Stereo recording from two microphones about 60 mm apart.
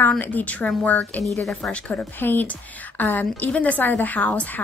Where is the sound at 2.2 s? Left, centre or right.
Left.